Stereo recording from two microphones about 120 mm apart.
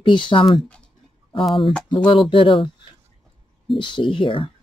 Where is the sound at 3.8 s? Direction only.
45° left (ahead or behind).